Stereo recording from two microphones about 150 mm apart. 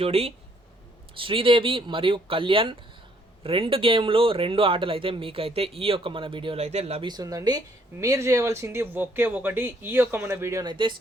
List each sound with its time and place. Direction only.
0.0 s speech: 40° right (ahead or behind)
7.1 s speech: 25° right (ahead or behind)
10.7 s speech: 30° right (ahead or behind)